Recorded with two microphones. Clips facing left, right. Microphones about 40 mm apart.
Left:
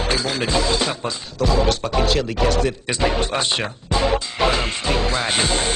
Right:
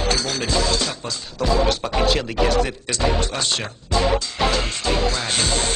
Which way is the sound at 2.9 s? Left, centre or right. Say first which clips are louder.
Left 2 dB; left.